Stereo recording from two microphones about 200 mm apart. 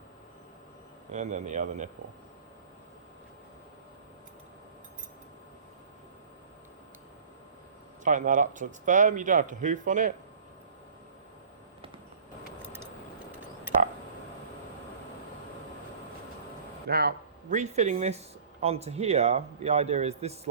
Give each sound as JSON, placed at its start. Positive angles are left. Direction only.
{"t": 1.1, "sound": "speech", "side_deg": -35}
{"t": 8.0, "sound": "speech", "side_deg": -40}
{"t": 12.6, "sound": "vehicle", "side_deg": -10}
{"t": 16.9, "sound": "a man's voice", "side_deg": -50}
{"t": 17.6, "sound": "speech", "side_deg": -35}